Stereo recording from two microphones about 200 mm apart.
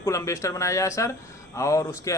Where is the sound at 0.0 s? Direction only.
15° left (ahead or behind).